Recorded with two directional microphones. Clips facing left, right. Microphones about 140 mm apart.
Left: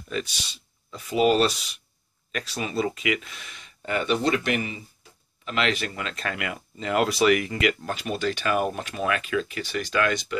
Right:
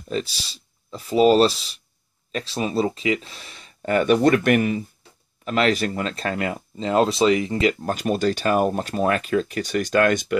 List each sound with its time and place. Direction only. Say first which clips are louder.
0.1 s speech: right 4 dB; 35° right (ahead or behind); by 4.8 s 55° right (ahead or behind)
5.4 s speech: right 6 dB; 40° right (ahead or behind)
7.8 s speech: right 6 dB; 45° right (ahead or behind)